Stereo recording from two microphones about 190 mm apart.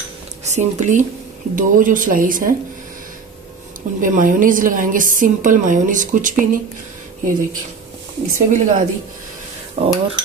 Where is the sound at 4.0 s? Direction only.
45° right (ahead or behind).